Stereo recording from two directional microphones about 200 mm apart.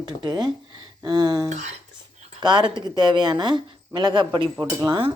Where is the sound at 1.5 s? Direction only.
35° right (ahead or behind).